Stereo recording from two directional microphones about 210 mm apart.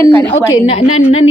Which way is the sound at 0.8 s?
85° left.